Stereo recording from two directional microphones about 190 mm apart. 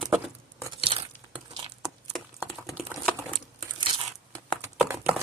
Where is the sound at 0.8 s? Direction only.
30° right (ahead or behind).